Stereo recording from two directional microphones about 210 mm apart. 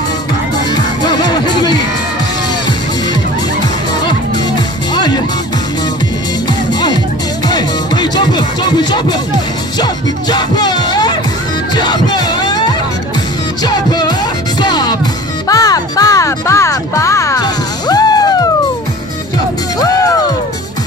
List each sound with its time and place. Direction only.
0.7 s music: 20° left (ahead or behind)
4.9 s music: 20° left (ahead or behind)
6.7 s music: 20° left (ahead or behind)
10.3 s music: 20° left (ahead or behind)
19.8 s music: 15° left (ahead or behind)